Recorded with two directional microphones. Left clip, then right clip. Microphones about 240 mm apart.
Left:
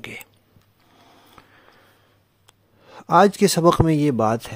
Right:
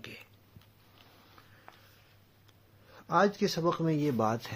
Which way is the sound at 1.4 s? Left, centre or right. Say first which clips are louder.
Left 10 dB; left.